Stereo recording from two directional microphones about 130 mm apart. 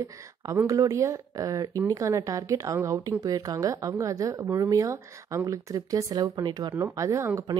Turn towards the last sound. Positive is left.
turn(degrees=-20)  # may be behind; listen again after turning